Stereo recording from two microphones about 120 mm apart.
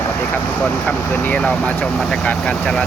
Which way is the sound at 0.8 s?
10° left (ahead or behind).